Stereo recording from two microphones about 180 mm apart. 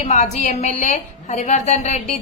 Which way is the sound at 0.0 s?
40° left (ahead or behind).